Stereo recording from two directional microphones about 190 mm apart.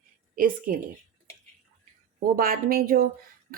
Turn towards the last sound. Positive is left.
turn(degrees=-50)  # may be behind; listen again after turning